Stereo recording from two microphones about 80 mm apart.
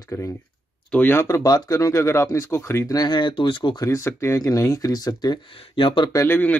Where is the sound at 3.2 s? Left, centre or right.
Left.